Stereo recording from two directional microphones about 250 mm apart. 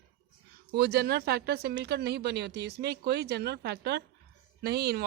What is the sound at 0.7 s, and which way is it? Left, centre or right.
A woman's voice, right.